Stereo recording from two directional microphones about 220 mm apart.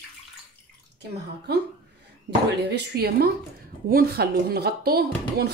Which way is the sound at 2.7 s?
45° right (ahead or behind).